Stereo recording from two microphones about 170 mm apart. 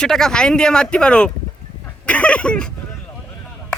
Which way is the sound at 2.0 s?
5° left (ahead or behind).